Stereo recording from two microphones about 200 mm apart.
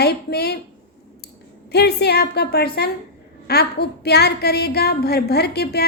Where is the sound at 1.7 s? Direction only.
55° left (ahead or behind).